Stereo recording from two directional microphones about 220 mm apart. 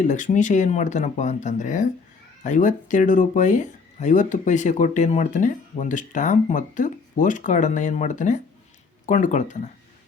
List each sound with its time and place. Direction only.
0.0 s speech: 35° left (ahead or behind)